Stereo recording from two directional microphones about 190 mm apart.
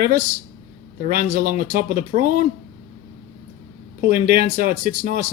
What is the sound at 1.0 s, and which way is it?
Speech, 50° right (ahead or behind).